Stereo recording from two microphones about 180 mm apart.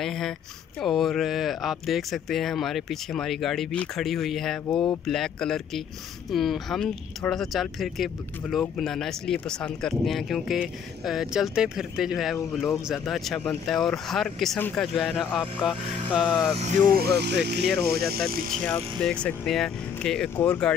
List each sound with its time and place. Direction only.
0.0 s speech: centre (ahead or behind)
16.5 s speech: 40° right (ahead or behind)
16.9 s speech: 60° right (ahead or behind)
18.7 s speech: 5° left (ahead or behind)